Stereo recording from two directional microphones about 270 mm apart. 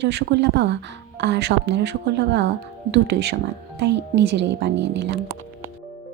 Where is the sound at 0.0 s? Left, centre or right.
Right.